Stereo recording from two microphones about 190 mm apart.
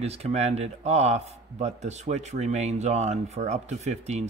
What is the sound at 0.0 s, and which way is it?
A man's voice, 35° right (ahead or behind).